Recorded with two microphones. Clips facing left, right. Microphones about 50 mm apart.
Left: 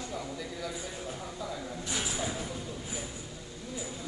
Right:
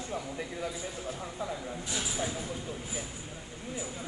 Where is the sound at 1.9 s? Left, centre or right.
Left.